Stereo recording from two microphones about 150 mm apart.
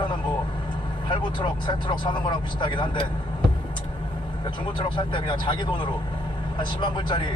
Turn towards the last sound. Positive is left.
turn(degrees=30)  # may be behind; listen again after turning